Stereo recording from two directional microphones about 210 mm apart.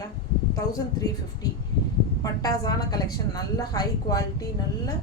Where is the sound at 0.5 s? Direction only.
15° left (ahead or behind).